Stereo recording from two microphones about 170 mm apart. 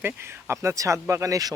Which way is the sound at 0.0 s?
15° right (ahead or behind).